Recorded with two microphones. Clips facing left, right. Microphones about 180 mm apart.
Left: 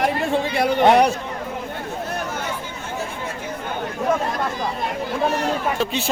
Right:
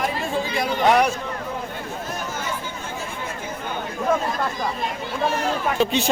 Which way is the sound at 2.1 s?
60° left (ahead or behind).